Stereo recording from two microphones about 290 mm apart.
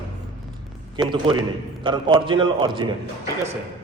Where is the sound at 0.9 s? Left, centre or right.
Centre.